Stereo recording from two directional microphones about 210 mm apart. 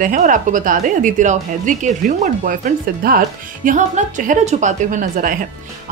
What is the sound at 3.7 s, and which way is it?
A woman's voice, 35° right (ahead or behind).